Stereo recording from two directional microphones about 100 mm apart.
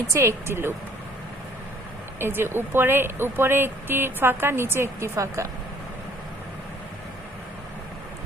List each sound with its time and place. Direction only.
0.1 s speech: 25° right (ahead or behind)
2.1 s speech: 25° right (ahead or behind)